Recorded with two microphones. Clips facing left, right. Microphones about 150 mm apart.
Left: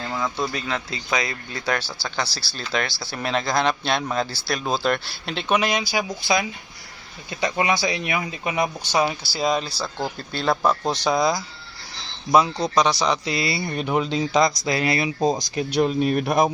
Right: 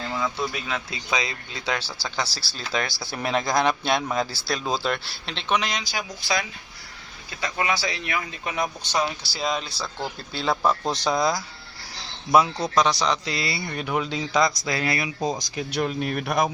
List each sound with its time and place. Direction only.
0.1 s speech: centre (ahead or behind)
4.8 s speech: 5° left (ahead or behind)
13.2 s speech: 15° left (ahead or behind)
13.5 s speech: 25° left (ahead or behind)